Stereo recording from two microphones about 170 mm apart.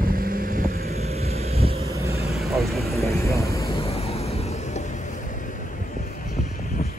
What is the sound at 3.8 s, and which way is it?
Vehicle, 35° left (ahead or behind).